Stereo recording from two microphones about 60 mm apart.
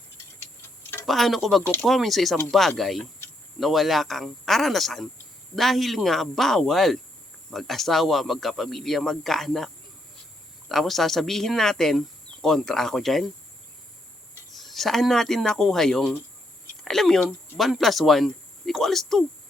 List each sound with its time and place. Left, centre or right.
0.8 s a sound: left
1.0 s speech: centre
10.7 s speech: centre
14.5 s speech: centre